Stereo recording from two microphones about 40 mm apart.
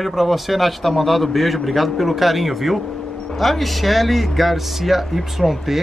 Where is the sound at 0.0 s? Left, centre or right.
Centre.